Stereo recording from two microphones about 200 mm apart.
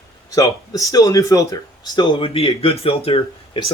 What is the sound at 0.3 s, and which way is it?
A man's voice, 15° left (ahead or behind).